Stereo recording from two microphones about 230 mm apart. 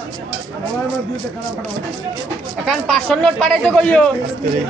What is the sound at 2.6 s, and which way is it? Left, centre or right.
Speech, centre.